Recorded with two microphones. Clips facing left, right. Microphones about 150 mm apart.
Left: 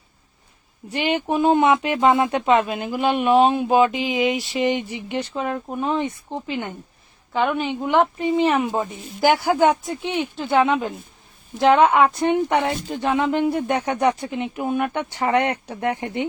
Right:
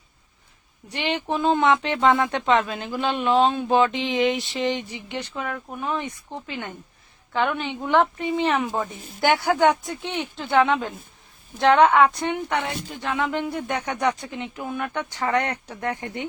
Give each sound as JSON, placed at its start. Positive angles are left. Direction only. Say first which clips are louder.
{"t": 0.9, "sound": "speech", "louder": "left 4 dB", "side_deg": 15}
{"t": 14.2, "sound": "speech", "louder": "left 6 dB", "side_deg": 15}